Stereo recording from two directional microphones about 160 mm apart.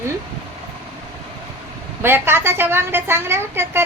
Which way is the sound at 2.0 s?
15° right (ahead or behind).